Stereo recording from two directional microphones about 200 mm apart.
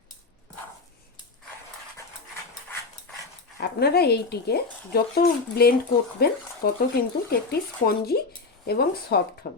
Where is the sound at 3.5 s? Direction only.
50° left (ahead or behind).